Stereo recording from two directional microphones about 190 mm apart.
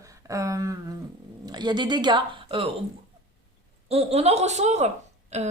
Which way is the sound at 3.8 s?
35° right (ahead or behind).